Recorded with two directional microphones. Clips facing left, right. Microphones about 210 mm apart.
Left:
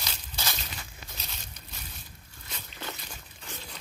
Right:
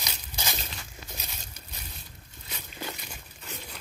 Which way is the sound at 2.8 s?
10° right (ahead or behind).